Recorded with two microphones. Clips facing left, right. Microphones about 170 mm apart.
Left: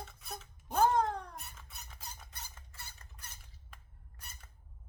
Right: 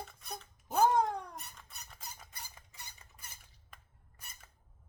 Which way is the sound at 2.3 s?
10° right (ahead or behind).